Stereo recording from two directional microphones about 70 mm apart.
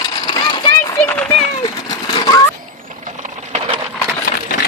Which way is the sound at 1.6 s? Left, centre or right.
Left.